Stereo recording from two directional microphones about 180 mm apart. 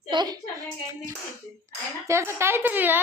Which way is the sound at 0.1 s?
25° right (ahead or behind).